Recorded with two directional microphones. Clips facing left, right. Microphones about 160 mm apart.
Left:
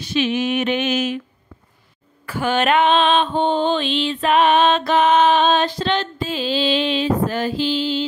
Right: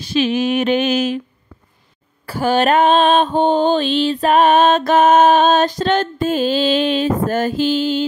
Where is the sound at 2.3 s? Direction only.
35° right (ahead or behind).